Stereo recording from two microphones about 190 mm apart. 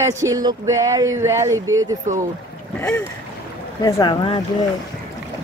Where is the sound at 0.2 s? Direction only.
20° right (ahead or behind).